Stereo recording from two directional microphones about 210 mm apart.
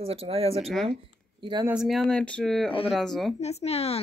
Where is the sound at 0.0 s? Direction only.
30° right (ahead or behind).